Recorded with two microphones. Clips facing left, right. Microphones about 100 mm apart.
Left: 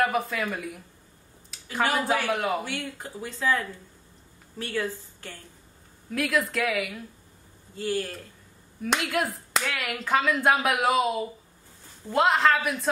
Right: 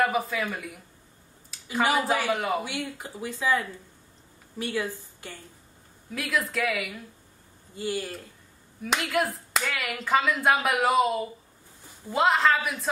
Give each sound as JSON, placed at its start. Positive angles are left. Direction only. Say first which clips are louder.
{"t": 0.0, "sound": "speech", "louder": "even", "side_deg": 0}
{"t": 2.6, "sound": "speech", "louder": "even", "side_deg": -15}
{"t": 6.1, "sound": "speech", "louder": "left 3 dB", "side_deg": 0}
{"t": 7.7, "sound": "speech", "louder": "left 2 dB", "side_deg": -10}
{"t": 8.8, "sound": "speech", "louder": "even", "side_deg": 0}